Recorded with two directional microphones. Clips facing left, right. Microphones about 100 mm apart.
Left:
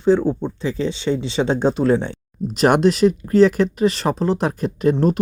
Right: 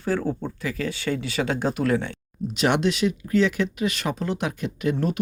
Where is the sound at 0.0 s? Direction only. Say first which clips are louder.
Left 9 dB; 20° left (ahead or behind).